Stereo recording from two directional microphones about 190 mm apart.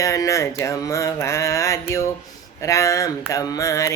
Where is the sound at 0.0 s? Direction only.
15° left (ahead or behind).